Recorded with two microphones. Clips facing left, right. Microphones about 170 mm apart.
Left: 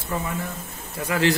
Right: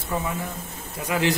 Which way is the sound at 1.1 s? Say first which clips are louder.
Left 1 dB; 15° right (ahead or behind).